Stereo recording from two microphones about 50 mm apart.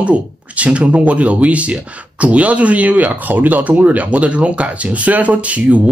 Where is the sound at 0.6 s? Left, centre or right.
Right.